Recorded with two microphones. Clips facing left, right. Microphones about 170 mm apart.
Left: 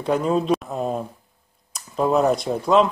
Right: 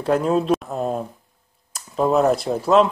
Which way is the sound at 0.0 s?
Centre (ahead or behind).